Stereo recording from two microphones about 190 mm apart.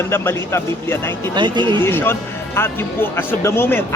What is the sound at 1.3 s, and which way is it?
Speech, 25° right (ahead or behind).